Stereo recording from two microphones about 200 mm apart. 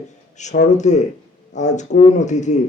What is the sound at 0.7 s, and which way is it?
A man's voice, 35° left (ahead or behind).